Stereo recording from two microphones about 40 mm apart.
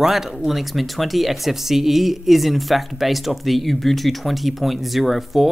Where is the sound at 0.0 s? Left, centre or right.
Centre.